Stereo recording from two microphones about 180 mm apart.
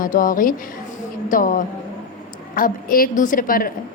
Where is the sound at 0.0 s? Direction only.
50° left (ahead or behind).